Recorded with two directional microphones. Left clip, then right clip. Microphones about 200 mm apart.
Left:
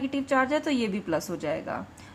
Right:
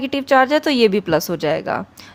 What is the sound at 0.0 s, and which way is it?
A woman's voice, 50° right (ahead or behind).